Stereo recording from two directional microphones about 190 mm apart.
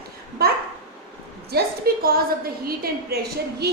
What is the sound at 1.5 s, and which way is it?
A woman's voice, 55° right (ahead or behind).